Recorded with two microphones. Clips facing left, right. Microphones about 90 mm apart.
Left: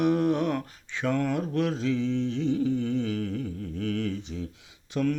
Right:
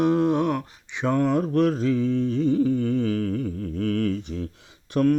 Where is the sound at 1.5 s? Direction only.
50° right (ahead or behind).